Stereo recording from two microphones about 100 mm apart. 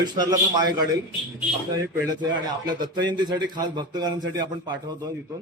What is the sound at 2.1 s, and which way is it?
A man's voice, 50° right (ahead or behind).